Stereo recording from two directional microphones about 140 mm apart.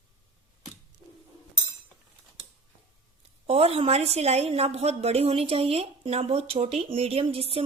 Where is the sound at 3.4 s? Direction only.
45° right (ahead or behind).